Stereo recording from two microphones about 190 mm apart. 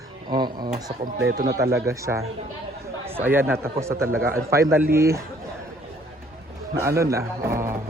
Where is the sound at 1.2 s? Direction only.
75° right (ahead or behind).